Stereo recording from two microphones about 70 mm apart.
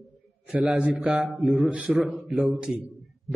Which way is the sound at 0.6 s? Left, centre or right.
Centre.